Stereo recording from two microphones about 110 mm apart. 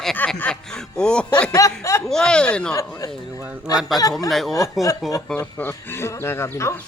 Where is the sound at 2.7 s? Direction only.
30° left (ahead or behind).